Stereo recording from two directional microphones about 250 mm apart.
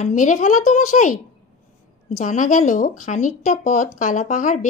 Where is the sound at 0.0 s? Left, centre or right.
Left.